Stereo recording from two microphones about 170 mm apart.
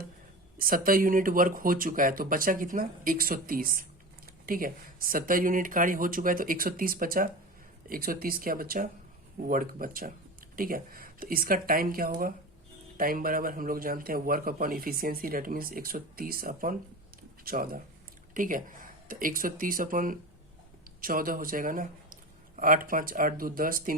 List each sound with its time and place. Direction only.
0.6 s a man's voice: 55° right (ahead or behind)